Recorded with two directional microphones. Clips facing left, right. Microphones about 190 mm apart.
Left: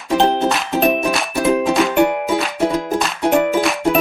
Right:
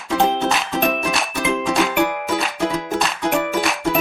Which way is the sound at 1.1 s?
Centre (ahead or behind).